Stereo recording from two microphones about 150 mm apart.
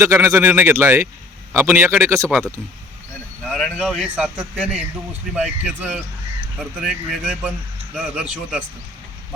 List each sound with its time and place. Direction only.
0.0 s a man's voice: 20° right (ahead or behind)
3.4 s a man's voice: centre (ahead or behind)